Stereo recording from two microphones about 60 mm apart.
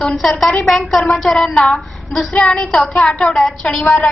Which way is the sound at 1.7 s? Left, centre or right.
Centre.